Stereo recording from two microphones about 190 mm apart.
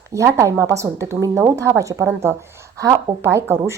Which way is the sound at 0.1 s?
15° right (ahead or behind).